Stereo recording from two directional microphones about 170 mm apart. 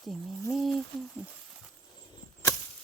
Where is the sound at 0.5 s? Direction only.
Centre (ahead or behind).